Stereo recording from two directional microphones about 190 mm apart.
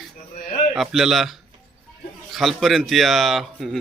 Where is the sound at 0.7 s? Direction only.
5° right (ahead or behind).